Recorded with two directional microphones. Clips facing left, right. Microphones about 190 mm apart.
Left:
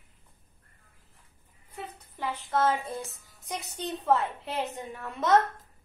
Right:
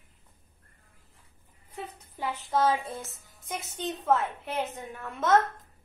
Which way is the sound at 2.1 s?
10° right (ahead or behind).